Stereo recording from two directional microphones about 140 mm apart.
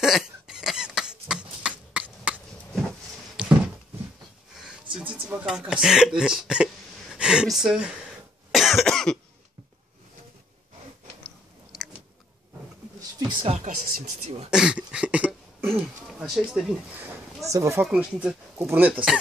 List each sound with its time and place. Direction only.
0.0 s cough: 5° right (ahead or behind)
3.3 s a sound: 10° right (ahead or behind)
5.3 s speech: 5° right (ahead or behind)
8.5 s cough: centre (ahead or behind)
13.7 s speech: 85° right
14.5 s speech: 5° right (ahead or behind)
17.4 s speech: 25° right (ahead or behind)